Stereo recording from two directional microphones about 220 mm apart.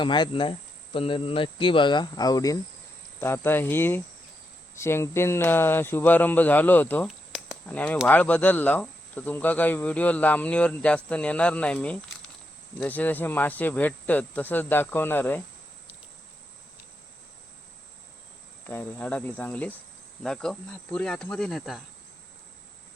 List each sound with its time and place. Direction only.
0.0 s speech: 20° left (ahead or behind)
18.6 s speech: 10° left (ahead or behind)
20.2 s cricket: 5° left (ahead or behind)